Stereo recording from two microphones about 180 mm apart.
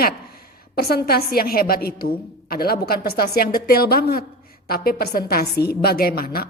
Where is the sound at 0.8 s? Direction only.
60° left (ahead or behind).